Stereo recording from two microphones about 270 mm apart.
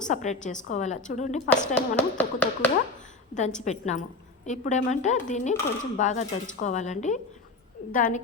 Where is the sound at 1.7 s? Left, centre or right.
Centre.